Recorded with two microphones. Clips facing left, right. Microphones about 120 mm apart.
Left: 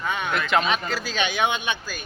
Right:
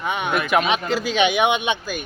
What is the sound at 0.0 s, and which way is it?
Speech, 20° right (ahead or behind).